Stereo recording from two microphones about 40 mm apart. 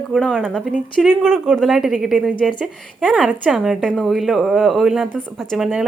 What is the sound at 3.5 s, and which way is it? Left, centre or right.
Speech, centre.